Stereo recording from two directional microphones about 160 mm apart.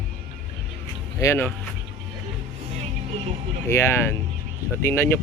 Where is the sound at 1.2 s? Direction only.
15° left (ahead or behind).